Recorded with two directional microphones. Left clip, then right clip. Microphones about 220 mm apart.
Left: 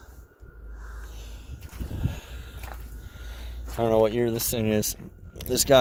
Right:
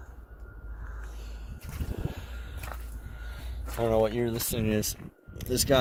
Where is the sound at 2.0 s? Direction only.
45° left (ahead or behind).